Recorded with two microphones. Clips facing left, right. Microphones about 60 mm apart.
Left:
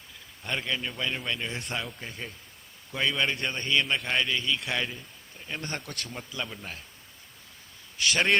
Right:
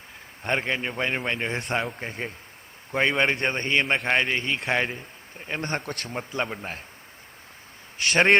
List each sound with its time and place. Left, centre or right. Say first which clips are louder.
0.4 s a man's voice: right 5 dB; right
7.9 s a man's voice: right 5 dB; right